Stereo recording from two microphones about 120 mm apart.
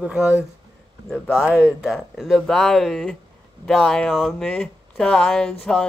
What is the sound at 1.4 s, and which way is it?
Speech, 5° right (ahead or behind).